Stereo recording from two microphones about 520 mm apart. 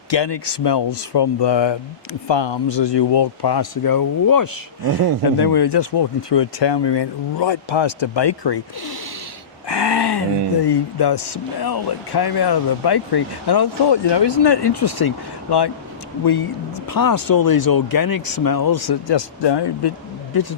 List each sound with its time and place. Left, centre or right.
0.1 s speech: left
9.6 s speech: left
16.9 s speech: left